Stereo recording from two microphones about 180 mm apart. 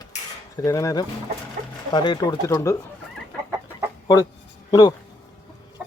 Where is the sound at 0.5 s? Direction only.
20° left (ahead or behind).